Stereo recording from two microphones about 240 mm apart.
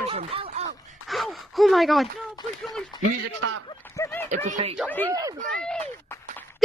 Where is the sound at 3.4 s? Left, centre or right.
Right.